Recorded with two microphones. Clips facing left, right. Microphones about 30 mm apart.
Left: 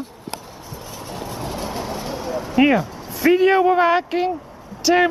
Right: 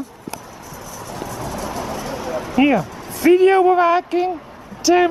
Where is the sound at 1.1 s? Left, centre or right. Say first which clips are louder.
Right 1 dB; left.